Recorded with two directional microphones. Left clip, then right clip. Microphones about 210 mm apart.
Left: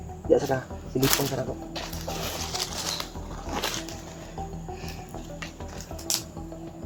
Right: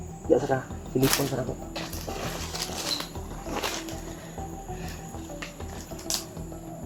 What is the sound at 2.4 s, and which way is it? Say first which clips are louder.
Music: left 2 dB; 35° left (ahead or behind).